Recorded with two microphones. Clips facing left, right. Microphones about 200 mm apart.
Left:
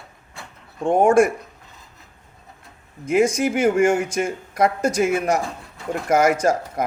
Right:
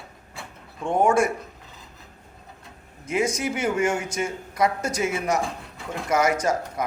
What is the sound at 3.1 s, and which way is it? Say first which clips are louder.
Speech: left 6 dB; 55° left (ahead or behind).